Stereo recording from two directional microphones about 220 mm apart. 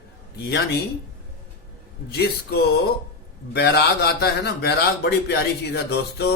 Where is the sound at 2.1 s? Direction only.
45° left (ahead or behind).